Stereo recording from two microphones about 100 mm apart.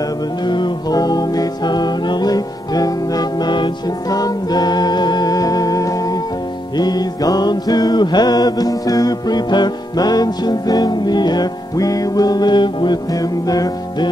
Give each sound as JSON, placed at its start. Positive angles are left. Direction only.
{"t": 0.5, "sound": "music", "side_deg": 45}
{"t": 13.5, "sound": "music", "side_deg": 40}